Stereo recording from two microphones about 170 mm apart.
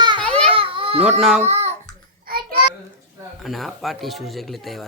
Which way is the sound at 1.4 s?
40° right (ahead or behind).